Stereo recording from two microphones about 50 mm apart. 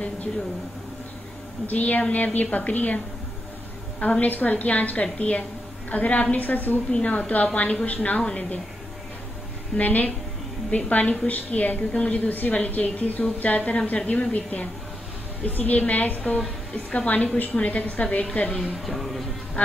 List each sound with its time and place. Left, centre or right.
1.7 s a woman's voice: left
4.0 s a woman's voice: left
6.9 s a woman's voice: left
9.8 s a woman's voice: left
18.6 s speech: centre